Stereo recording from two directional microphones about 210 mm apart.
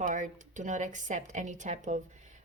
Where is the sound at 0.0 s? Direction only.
40° right (ahead or behind).